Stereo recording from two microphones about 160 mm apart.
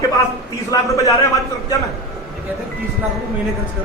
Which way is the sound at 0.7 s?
20° left (ahead or behind).